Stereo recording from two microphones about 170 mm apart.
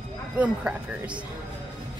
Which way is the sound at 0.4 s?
5° right (ahead or behind).